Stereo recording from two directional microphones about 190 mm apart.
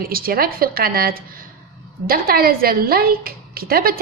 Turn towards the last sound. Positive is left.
turn(degrees=-50)  # may be behind; listen again after turning